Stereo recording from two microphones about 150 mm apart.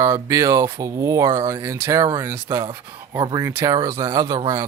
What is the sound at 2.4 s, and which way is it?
Speech, 30° right (ahead or behind).